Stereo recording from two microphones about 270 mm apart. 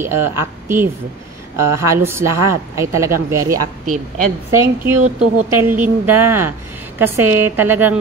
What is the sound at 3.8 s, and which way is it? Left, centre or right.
Speech, right.